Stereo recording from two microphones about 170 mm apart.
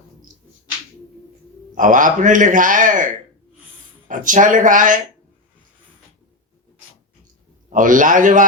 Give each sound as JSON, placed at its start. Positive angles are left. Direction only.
{"t": 1.7, "sound": "a man's voice", "side_deg": -50}
{"t": 7.7, "sound": "a man's voice", "side_deg": -50}